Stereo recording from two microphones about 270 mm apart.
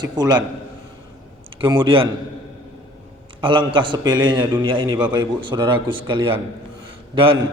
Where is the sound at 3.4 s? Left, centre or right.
Centre.